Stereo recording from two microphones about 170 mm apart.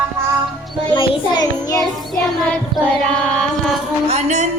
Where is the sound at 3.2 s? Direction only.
5° left (ahead or behind).